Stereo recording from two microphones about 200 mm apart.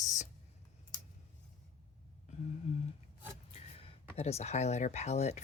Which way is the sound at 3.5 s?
30° left (ahead or behind).